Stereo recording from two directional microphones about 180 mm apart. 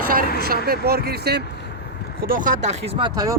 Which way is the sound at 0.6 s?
60° right (ahead or behind).